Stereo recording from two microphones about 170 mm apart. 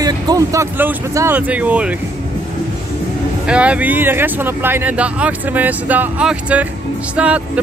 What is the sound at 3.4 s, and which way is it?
Speech, 5° right (ahead or behind).